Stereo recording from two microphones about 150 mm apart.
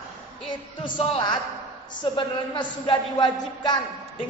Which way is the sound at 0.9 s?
35° left (ahead or behind).